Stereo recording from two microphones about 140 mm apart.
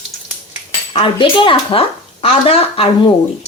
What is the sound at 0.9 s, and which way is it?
Speech, 40° left (ahead or behind).